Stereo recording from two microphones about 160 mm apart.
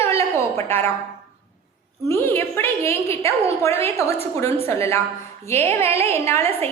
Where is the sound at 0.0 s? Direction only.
15° left (ahead or behind).